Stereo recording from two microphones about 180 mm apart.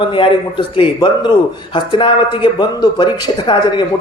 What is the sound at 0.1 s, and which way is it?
Speech, 30° left (ahead or behind).